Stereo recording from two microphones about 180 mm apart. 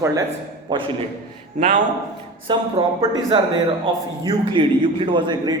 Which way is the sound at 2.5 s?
25° right (ahead or behind).